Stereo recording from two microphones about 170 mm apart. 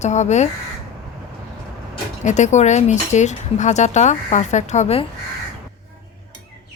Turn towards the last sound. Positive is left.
turn(degrees=40)  # may be behind; listen again after turning